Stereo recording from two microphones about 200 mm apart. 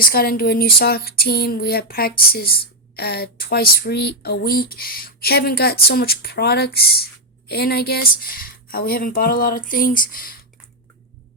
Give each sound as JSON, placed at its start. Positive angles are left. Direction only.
{"t": 0.0, "sound": "speech", "side_deg": 45}